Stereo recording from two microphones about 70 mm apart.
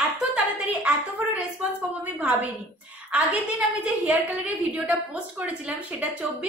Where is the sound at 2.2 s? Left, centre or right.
Right.